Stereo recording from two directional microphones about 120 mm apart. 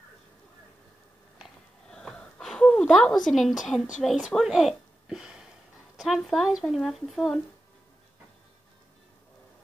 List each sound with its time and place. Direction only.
1.4 s sniff: 5° left (ahead or behind)
3.3 s a woman's voice: centre (ahead or behind)